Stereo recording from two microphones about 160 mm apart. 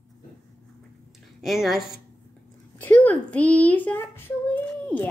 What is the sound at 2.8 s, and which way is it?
A child's voice, 10° left (ahead or behind).